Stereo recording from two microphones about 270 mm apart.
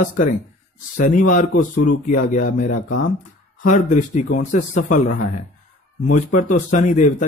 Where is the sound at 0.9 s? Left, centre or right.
Left.